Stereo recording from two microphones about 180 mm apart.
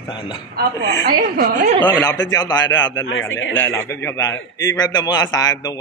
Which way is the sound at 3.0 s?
90° left.